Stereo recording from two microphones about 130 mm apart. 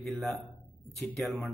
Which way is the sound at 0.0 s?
Centre (ahead or behind).